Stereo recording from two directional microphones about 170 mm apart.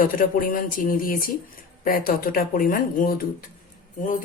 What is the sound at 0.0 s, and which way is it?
Speech, 55° left (ahead or behind).